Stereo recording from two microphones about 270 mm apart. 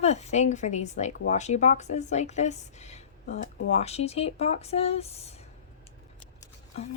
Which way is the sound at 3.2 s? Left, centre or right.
Left.